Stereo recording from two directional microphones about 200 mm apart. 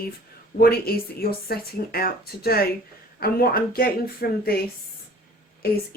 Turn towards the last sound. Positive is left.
turn(degrees=50)  # may be behind; listen again after turning